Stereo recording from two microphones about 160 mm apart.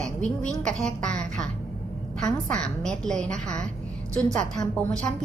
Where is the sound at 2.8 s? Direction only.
5° left (ahead or behind).